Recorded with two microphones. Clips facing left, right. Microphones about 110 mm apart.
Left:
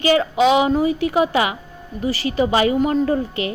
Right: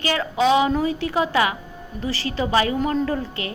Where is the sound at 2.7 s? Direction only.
5° left (ahead or behind).